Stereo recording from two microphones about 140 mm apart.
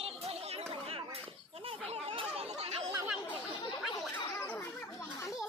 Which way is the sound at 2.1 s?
40° right (ahead or behind).